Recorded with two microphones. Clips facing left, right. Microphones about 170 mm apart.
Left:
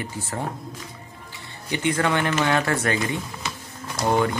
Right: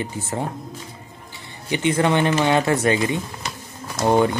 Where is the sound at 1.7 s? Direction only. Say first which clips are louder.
Right 4 dB; 20° right (ahead or behind).